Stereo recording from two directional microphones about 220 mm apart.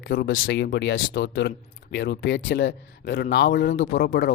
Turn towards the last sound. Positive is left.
turn(degrees=50)  # may be behind; listen again after turning